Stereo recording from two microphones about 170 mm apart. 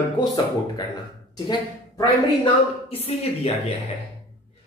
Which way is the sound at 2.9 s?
35° left (ahead or behind).